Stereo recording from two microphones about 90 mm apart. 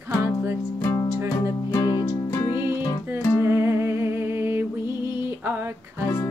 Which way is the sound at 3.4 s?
30° right (ahead or behind).